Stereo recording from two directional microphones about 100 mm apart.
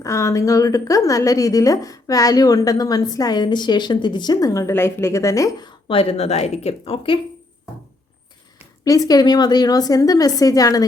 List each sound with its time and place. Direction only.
0.0 s a woman's voice: 30° left (ahead or behind)
5.6 s a woman's voice: 65° left (ahead or behind)
8.8 s a woman's voice: 35° left (ahead or behind)